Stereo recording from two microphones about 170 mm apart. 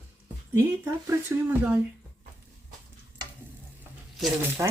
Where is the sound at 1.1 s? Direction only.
10° right (ahead or behind).